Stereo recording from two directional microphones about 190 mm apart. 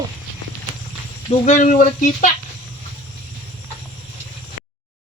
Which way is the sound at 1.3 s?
40° left (ahead or behind).